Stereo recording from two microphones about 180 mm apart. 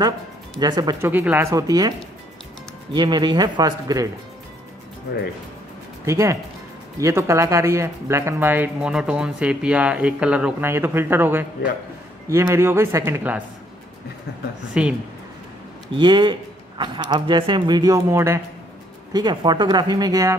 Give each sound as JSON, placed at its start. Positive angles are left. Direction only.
{"t": 0.6, "sound": "speech", "side_deg": -25}
{"t": 1.0, "sound": "speech", "side_deg": -10}
{"t": 6.0, "sound": "speech", "side_deg": -15}
{"t": 14.7, "sound": "speech", "side_deg": -5}
{"t": 16.0, "sound": "speech", "side_deg": -25}